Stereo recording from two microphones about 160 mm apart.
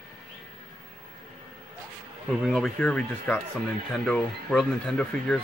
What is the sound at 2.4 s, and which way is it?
Speech, centre (ahead or behind).